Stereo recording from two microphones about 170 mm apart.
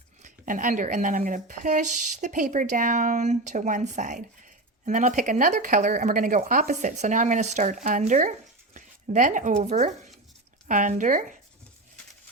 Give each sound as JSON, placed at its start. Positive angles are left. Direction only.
{"t": 0.2, "sound": "speech", "side_deg": -50}